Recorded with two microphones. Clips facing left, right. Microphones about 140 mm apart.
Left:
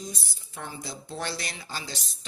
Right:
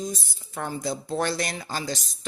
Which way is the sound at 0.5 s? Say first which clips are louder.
Right 9 dB; 60° right (ahead or behind).